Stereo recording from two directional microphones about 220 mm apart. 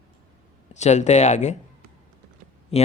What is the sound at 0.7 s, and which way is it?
Speech, 30° left (ahead or behind).